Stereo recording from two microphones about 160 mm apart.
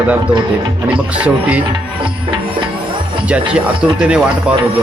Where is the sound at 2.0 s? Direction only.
35° right (ahead or behind).